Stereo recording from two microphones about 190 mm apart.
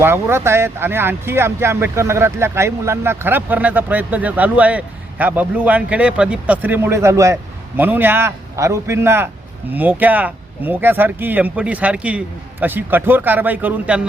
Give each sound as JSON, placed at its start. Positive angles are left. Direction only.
{"t": 0.0, "sound": "speech", "side_deg": -15}